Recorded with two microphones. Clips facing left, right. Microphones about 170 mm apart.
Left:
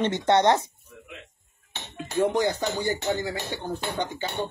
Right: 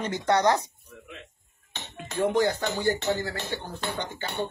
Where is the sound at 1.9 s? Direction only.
20° left (ahead or behind).